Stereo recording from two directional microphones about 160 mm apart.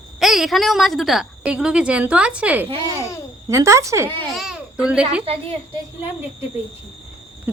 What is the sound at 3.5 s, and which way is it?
Speech, 20° right (ahead or behind).